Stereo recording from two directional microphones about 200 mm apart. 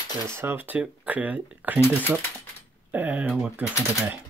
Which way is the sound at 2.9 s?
10° right (ahead or behind).